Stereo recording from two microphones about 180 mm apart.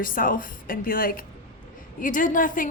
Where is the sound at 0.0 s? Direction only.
50° left (ahead or behind).